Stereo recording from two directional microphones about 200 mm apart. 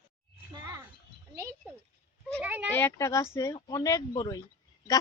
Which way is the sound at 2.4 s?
10° right (ahead or behind).